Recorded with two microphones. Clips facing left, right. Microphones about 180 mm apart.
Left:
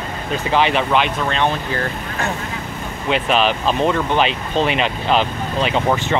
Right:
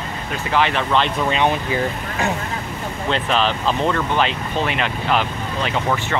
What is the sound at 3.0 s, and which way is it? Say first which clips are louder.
Speech: left 3 dB; 15° left (ahead or behind).